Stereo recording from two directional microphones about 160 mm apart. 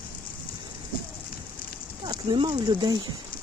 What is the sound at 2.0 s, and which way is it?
Speech, 30° right (ahead or behind).